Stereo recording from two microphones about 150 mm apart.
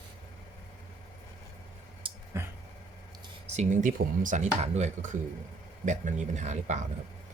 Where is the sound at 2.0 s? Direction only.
35° right (ahead or behind).